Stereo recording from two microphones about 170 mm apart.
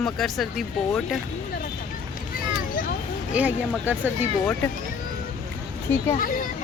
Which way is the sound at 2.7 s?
55° left (ahead or behind).